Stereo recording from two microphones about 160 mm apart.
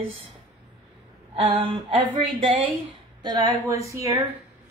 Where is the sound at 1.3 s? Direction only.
30° right (ahead or behind).